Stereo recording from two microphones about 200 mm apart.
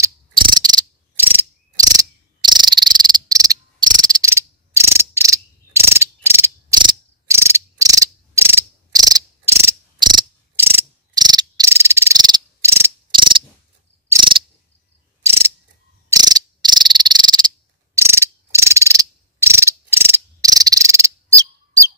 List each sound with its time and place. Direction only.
0.0 s cricket: 20° right (ahead or behind)
13.1 s ratchet: 25° right (ahead or behind)
15.2 s mechanisms: 15° right (ahead or behind)
16.1 s cricket: 20° right (ahead or behind)